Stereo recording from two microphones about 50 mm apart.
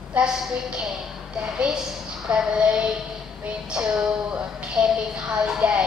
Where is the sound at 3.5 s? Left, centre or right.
Centre.